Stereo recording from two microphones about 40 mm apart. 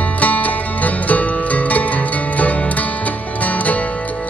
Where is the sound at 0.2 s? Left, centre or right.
Left.